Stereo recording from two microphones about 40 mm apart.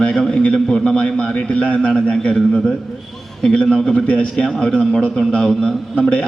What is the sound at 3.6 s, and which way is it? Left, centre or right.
Speech, centre.